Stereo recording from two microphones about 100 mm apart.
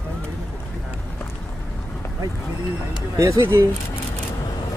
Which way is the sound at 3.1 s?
30° right (ahead or behind).